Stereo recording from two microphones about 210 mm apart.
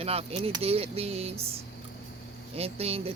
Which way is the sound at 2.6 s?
30° right (ahead or behind).